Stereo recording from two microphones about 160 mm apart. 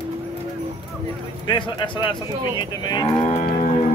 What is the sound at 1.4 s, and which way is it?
Cattle, 30° left (ahead or behind).